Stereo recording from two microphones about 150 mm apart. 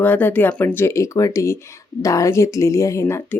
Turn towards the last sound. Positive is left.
turn(degrees=15)  # may be behind; listen again after turning